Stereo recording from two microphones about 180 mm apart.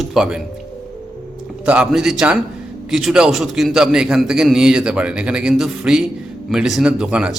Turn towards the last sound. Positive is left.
turn(degrees=-5)  # may be behind; listen again after turning